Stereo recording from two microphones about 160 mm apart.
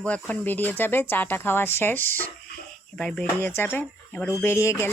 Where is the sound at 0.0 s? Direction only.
5° left (ahead or behind).